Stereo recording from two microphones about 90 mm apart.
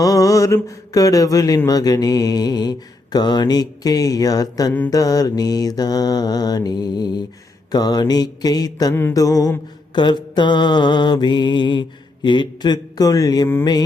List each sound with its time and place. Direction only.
0.0 s speech: 40° left (ahead or behind)
9.1 s mantra: 40° left (ahead or behind)
9.9 s mantra: 55° left (ahead or behind)